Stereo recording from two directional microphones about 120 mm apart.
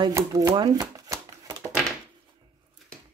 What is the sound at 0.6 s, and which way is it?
Shuffling cards, 35° right (ahead or behind).